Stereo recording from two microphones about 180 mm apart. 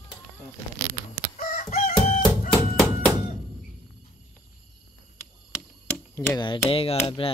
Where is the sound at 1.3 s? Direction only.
40° left (ahead or behind).